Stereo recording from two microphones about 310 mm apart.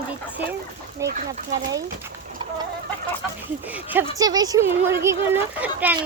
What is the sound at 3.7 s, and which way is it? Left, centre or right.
Speech, centre.